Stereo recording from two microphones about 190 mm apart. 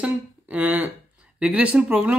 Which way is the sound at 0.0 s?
10° right (ahead or behind).